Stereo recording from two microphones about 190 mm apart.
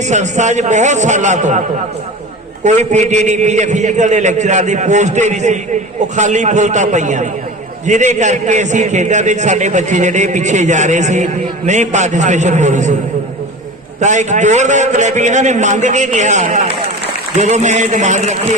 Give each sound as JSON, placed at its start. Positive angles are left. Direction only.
{"t": 0.0, "sound": "a man's voice", "side_deg": -40}
{"t": 2.6, "sound": "a man's voice", "side_deg": -40}
{"t": 14.0, "sound": "a man's voice", "side_deg": -40}